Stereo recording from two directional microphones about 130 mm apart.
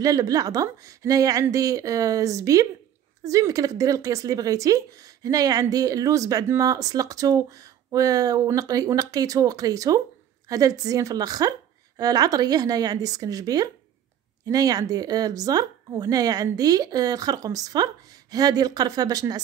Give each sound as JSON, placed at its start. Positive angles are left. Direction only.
{"t": 0.0, "sound": "speech", "side_deg": -30}